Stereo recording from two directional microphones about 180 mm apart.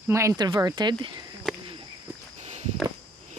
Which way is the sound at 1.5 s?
Centre (ahead or behind).